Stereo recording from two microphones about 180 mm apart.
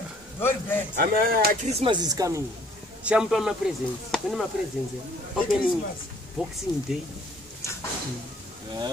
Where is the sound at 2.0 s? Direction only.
20° right (ahead or behind).